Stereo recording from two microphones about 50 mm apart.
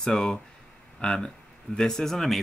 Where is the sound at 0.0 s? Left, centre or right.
Centre.